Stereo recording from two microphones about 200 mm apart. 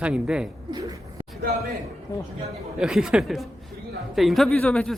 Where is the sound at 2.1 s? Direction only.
15° left (ahead or behind).